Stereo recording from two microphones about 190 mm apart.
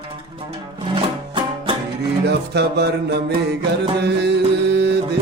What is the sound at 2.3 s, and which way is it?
Music, 60° right (ahead or behind).